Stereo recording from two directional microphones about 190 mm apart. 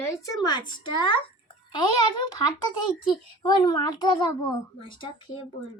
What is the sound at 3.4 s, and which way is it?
Speech, 25° left (ahead or behind).